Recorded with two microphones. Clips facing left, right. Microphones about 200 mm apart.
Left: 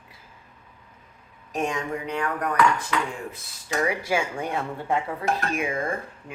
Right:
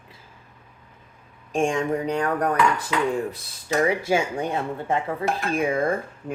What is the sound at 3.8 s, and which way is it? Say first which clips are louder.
Speech: right 3 dB; 25° right (ahead or behind).